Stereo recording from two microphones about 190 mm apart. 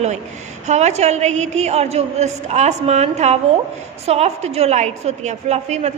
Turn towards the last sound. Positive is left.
turn(degrees=-35)  # may be behind; listen again after turning